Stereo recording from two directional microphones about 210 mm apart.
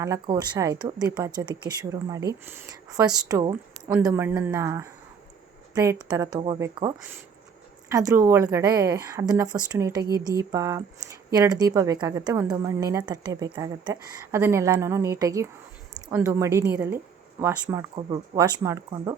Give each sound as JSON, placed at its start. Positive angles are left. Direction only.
{"t": 0.0, "sound": "a woman's voice", "side_deg": -15}